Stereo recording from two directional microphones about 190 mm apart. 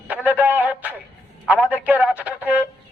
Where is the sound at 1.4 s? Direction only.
10° right (ahead or behind).